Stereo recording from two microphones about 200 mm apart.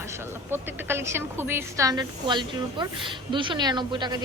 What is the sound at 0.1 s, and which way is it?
A woman's voice, 10° right (ahead or behind).